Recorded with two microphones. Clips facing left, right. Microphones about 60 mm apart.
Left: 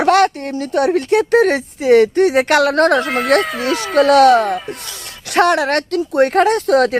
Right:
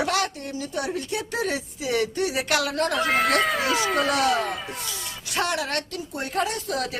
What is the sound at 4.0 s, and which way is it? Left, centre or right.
Speech, left.